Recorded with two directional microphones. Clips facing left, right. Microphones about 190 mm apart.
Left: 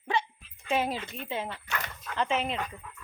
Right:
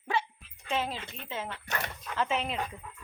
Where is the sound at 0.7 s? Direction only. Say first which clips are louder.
Left 4 dB; 10° left (ahead or behind).